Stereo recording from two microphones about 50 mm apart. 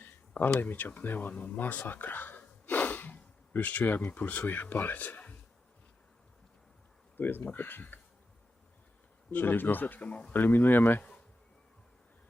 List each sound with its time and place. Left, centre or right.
0.0 s a sound: left
0.6 s speech: left
1.3 s speech: left
7.2 s speech: left
9.3 s speech: left
10.3 s speech: left